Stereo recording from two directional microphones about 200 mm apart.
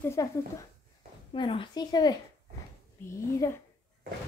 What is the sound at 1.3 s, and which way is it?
A woman's voice, 25° left (ahead or behind).